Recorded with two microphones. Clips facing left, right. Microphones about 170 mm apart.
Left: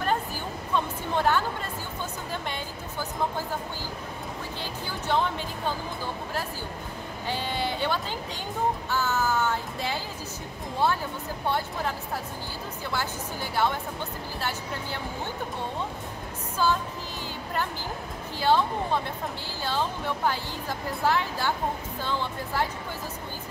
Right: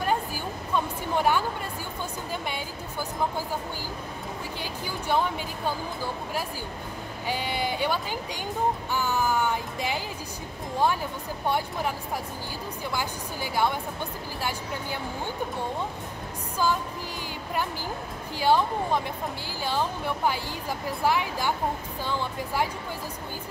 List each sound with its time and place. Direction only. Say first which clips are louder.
0.7 s speech: even; 10° right (ahead or behind)
2.4 s music: right 1 dB; 10° right (ahead or behind)
4.8 s music: right 1 dB; 10° right (ahead or behind)
7.2 s music: right 1 dB; 10° right (ahead or behind)
11.4 s music: right 1 dB; 15° right (ahead or behind)
12.9 s music: left 2 dB; 15° right (ahead or behind)
16.6 s music: left 1 dB; 15° right (ahead or behind)
18.4 s music: right 1 dB; 10° right (ahead or behind)